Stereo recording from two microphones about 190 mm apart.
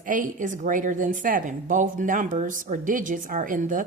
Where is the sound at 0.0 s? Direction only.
45° right (ahead or behind).